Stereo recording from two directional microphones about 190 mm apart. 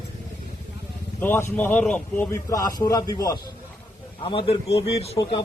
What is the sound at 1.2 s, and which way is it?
A man's voice, 10° left (ahead or behind).